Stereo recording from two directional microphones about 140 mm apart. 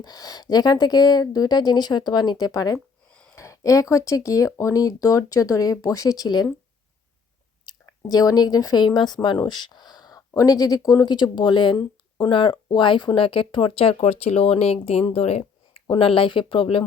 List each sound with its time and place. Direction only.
0.0 s speech: 30° left (ahead or behind)
2.7 s a sound: 5° left (ahead or behind)
3.3 s speech: 20° left (ahead or behind)
7.6 s speech: 25° left (ahead or behind); by 15.0 s 45° left (ahead or behind)
15.1 s a sound: 50° left (ahead or behind)
15.9 s speech: 40° left (ahead or behind)